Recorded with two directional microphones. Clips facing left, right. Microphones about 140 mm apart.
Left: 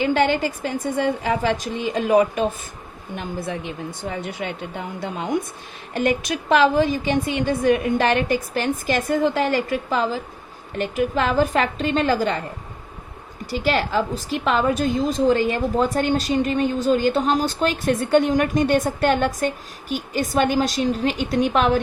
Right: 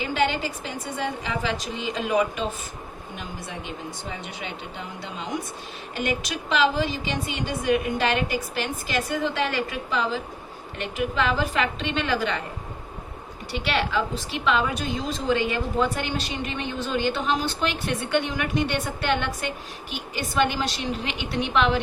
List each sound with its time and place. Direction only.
0.0 s a woman's voice: 45° left (ahead or behind)
4.1 s a woman's voice: 50° left (ahead or behind)
13.7 s a woman's voice: 40° left (ahead or behind)